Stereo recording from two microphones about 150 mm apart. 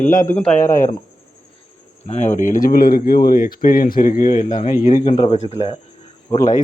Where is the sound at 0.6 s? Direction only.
55° left (ahead or behind).